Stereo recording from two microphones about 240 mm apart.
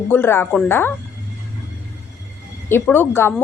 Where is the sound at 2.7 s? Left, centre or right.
Centre.